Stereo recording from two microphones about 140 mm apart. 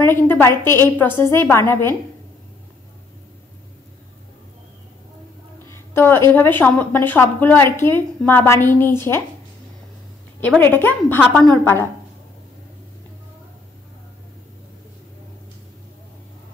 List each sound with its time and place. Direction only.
0.0 s a woman's voice: 15° left (ahead or behind)
5.9 s a woman's voice: 15° left (ahead or behind)
10.6 s a woman's voice: 15° left (ahead or behind)